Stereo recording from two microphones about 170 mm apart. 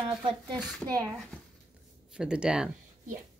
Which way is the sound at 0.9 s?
20° right (ahead or behind).